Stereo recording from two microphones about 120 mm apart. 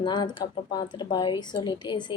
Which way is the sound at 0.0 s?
40° left (ahead or behind).